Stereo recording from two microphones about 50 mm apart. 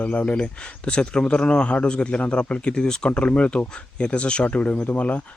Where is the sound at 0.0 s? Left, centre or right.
Left.